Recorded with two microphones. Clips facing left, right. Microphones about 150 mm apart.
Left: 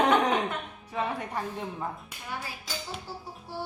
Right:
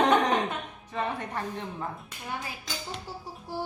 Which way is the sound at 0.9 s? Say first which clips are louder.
Even; 10° left (ahead or behind).